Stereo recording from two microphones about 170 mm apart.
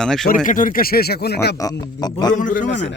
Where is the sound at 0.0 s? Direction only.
5° left (ahead or behind).